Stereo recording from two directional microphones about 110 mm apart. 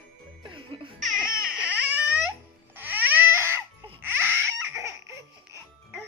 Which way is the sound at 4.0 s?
20° right (ahead or behind).